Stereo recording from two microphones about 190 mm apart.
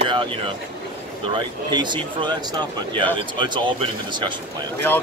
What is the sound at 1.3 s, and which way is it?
Speech, 25° right (ahead or behind).